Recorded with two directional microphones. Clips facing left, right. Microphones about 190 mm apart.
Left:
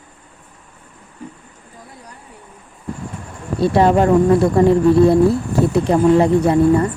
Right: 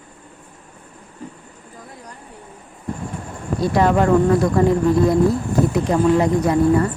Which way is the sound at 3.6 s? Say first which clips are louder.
Left 3 dB; 30° left (ahead or behind).